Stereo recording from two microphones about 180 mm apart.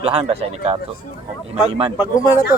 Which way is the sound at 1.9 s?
20° left (ahead or behind).